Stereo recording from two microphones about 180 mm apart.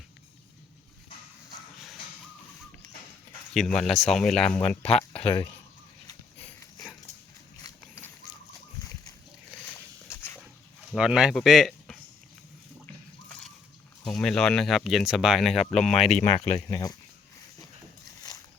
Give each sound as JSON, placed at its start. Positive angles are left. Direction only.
{"t": 3.5, "sound": "speech", "side_deg": 0}
{"t": 4.9, "sound": "speech", "side_deg": 35}
{"t": 7.6, "sound": "horse", "side_deg": 15}
{"t": 10.9, "sound": "speech", "side_deg": -5}
{"t": 14.0, "sound": "speech", "side_deg": 5}
{"t": 16.3, "sound": "speech", "side_deg": 35}
{"t": 16.6, "sound": "speech", "side_deg": 20}